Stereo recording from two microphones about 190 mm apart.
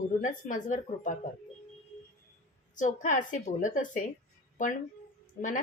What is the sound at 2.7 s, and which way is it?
A woman's voice, 40° left (ahead or behind).